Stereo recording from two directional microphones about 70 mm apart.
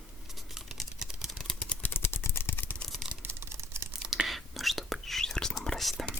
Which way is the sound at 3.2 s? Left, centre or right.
Right.